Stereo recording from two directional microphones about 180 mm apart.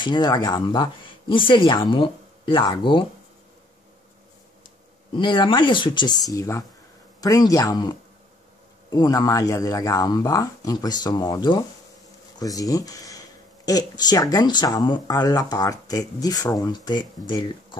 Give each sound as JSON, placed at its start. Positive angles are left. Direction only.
{"t": 0.0, "sound": "speech", "side_deg": 25}
{"t": 5.1, "sound": "speech", "side_deg": 25}